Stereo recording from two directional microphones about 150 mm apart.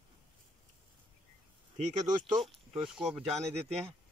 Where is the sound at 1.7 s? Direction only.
55° right (ahead or behind).